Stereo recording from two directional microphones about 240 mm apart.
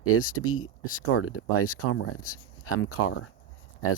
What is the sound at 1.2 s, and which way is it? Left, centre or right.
Speech, left.